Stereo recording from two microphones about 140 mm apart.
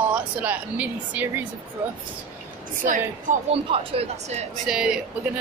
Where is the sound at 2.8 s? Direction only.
70° right (ahead or behind).